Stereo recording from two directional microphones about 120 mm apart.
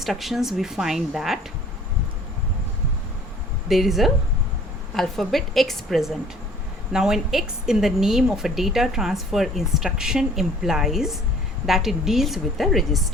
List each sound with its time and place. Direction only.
0.0 s a woman's voice: centre (ahead or behind)
3.7 s a woman's voice: centre (ahead or behind)